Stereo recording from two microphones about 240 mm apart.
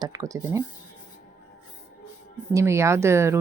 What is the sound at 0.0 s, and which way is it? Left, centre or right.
Speech, centre.